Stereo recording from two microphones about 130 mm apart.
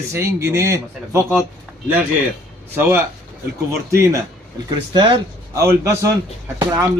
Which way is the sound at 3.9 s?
20° right (ahead or behind).